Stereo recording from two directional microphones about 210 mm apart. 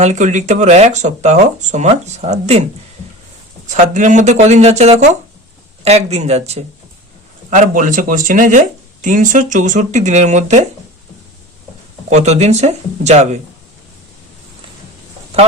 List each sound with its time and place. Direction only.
0.0 s speech: 35° right (ahead or behind)
3.7 s speech: 35° right (ahead or behind)
12.0 s speech: 35° right (ahead or behind)